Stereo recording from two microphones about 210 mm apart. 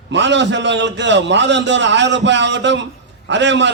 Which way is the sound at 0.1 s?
55° right (ahead or behind).